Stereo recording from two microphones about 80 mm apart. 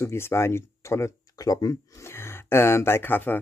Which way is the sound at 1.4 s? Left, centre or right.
Left.